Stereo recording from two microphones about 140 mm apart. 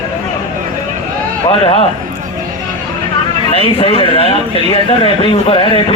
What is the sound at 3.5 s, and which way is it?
A man's voice, 40° left (ahead or behind).